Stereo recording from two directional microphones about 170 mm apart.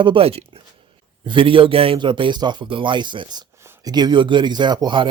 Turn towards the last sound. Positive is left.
turn(degrees=-25)  # may be behind; listen again after turning